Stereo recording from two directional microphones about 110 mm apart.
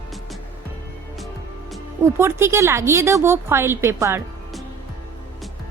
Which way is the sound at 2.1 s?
25° right (ahead or behind).